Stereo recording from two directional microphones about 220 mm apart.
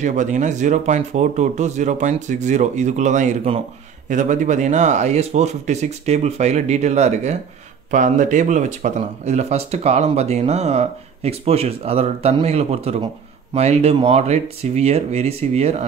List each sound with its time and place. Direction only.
0.0 s speech: 35° right (ahead or behind)